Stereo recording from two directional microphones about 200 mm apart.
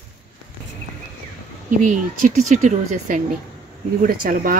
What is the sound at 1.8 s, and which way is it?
Speech, 40° right (ahead or behind).